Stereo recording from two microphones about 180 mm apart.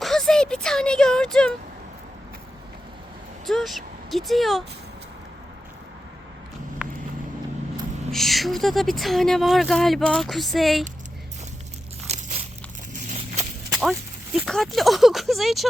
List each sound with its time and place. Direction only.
0.0 s a sound: centre (ahead or behind)
3.4 s speech: centre (ahead or behind)
6.8 s horse: 5° right (ahead or behind)
8.1 s speech: centre (ahead or behind)
12.0 s a sound: 35° right (ahead or behind)
13.1 s clip-clop: 40° right (ahead or behind)
14.3 s speech: centre (ahead or behind)